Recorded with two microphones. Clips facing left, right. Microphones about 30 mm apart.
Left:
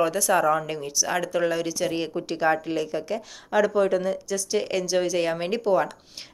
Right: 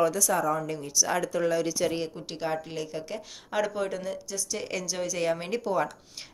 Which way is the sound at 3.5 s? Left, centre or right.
Centre.